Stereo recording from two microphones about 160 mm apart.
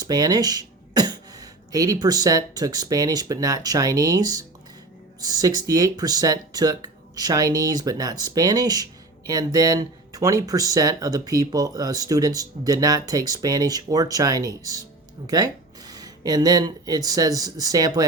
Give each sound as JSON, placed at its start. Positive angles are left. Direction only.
{"t": 0.0, "sound": "speech", "side_deg": -25}